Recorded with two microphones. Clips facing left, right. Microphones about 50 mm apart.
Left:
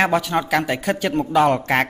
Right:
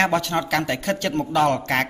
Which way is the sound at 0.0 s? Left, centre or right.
Centre.